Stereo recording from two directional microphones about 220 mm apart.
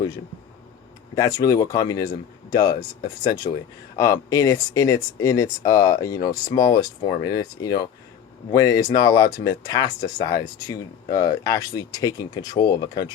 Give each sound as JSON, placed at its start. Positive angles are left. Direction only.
{"t": 1.1, "sound": "speech", "side_deg": 15}